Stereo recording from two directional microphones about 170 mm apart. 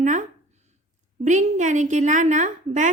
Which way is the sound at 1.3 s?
45° right (ahead or behind).